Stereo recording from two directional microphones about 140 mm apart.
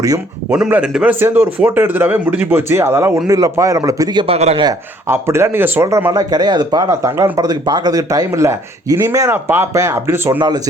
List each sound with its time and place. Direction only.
0.5 s speech: 5° right (ahead or behind); by 4.4 s 30° right (ahead or behind)
4.4 s a man's voice: 50° right (ahead or behind)
5.0 s speech: 20° right (ahead or behind)